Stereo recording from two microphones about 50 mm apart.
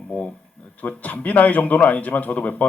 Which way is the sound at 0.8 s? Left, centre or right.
Left.